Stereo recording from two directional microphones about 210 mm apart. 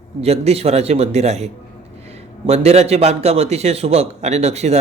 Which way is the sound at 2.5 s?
30° right (ahead or behind).